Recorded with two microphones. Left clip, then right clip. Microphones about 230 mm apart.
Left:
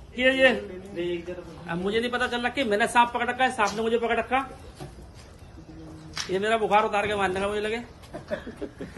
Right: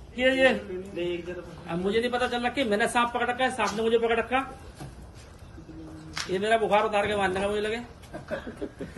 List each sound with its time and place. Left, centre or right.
0.1 s a woman's voice: centre
0.9 s speech: left
1.7 s a woman's voice: centre
6.2 s a woman's voice: centre